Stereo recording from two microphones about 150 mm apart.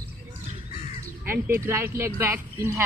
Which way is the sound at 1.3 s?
15° right (ahead or behind).